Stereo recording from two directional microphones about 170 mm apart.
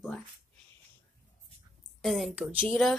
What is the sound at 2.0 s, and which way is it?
Speech, centre (ahead or behind).